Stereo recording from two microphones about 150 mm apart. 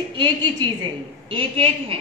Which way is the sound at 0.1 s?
30° right (ahead or behind).